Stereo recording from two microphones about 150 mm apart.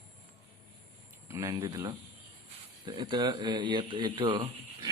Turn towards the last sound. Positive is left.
turn(degrees=-30)  # may be behind; listen again after turning